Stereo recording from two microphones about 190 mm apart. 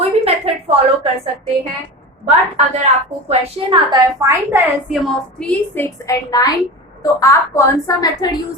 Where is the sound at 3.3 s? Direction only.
25° right (ahead or behind).